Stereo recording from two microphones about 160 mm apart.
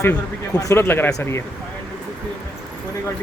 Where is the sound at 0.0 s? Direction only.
20° left (ahead or behind).